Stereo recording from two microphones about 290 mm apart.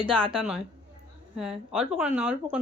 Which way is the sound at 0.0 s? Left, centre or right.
Centre.